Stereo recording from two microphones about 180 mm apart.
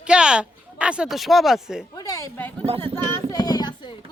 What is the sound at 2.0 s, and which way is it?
Speech, 20° left (ahead or behind).